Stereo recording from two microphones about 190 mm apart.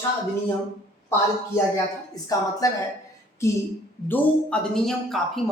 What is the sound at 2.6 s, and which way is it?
A woman's voice, 20° left (ahead or behind).